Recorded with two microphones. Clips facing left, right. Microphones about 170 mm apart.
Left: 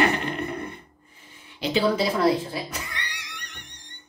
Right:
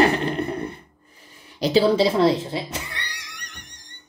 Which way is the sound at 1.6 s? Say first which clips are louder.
Right 5 dB; 35° right (ahead or behind).